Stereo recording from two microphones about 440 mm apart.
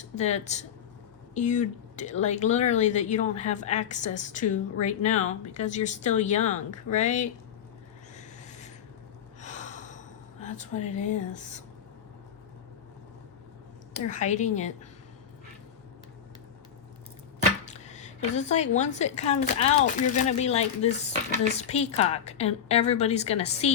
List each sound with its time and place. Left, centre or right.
0.0 s a woman's voice: centre
8.1 s a sound: centre
9.4 s gasp: centre
10.4 s a woman's voice: centre
13.9 s a woman's voice: centre
17.7 s a woman's voice: centre